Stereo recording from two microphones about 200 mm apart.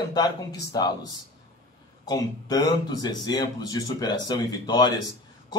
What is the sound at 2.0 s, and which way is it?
Speech, 20° left (ahead or behind).